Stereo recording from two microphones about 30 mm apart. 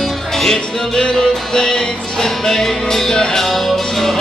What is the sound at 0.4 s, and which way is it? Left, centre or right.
Music, centre.